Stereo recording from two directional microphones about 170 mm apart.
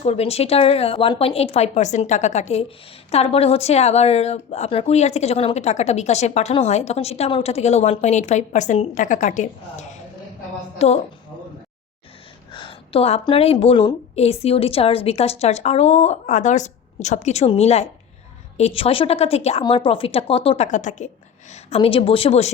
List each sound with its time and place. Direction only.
0.0 s speech: 35° left (ahead or behind)
12.5 s speech: 30° left (ahead or behind)